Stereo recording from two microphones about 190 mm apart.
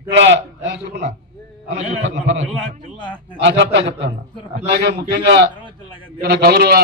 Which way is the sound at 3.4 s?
70° right (ahead or behind).